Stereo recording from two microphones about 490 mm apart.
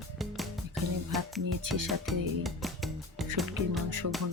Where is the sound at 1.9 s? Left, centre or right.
Centre.